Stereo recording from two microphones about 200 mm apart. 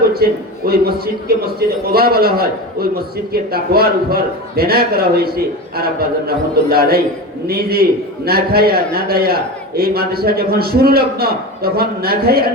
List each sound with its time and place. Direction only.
0.1 s a man's voice: 50° right (ahead or behind)